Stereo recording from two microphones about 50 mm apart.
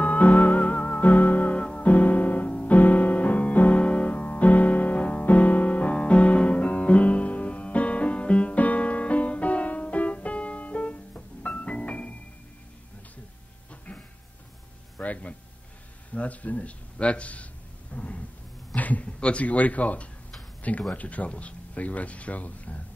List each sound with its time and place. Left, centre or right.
0.0 s music: left
13.7 s vehicle: left
15.0 s a sound: left
20.9 s speech: left